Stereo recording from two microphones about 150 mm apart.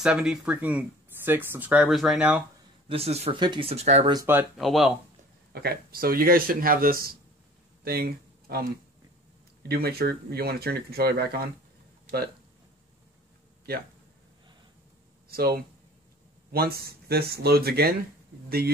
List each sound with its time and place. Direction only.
0.0 s speech: 5° right (ahead or behind)
2.9 s speech: 45° right (ahead or behind)
3.3 s speech: 30° right (ahead or behind)
4.1 s speech: 20° right (ahead or behind)
4.6 s speech: centre (ahead or behind)
5.5 s speech: 90° right
7.8 s a sound: 90° right
9.6 s speech: 90° right
15.2 s speech: 90° right